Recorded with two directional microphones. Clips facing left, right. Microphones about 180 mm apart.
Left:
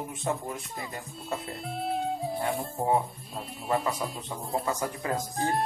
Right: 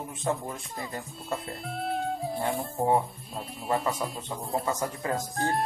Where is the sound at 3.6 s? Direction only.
Centre (ahead or behind).